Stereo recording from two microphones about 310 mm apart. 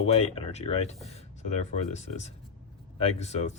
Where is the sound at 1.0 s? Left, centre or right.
Centre.